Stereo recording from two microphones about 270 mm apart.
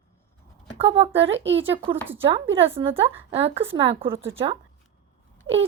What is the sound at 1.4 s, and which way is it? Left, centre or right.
Speech, right.